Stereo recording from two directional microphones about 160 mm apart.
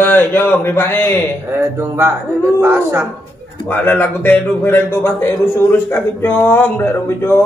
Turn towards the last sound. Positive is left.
turn(degrees=15)  # may be behind; listen again after turning